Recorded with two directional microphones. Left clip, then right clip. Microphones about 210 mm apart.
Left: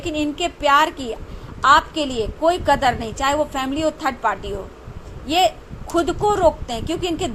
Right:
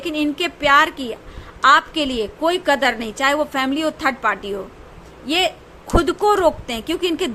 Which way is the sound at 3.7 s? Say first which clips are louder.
Even; 25° right (ahead or behind).